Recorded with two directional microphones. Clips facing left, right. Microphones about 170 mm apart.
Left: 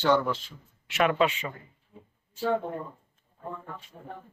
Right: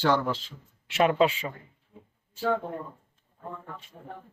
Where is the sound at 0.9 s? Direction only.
30° right (ahead or behind).